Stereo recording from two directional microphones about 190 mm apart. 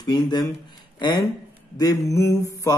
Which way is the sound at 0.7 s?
25° left (ahead or behind).